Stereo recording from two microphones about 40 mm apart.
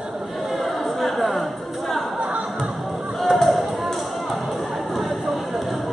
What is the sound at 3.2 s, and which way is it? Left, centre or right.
Basketball bounce, centre.